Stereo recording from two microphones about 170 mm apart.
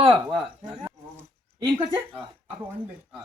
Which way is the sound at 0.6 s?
25° right (ahead or behind).